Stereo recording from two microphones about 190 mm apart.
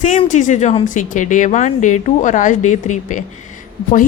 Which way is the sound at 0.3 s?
40° left (ahead or behind).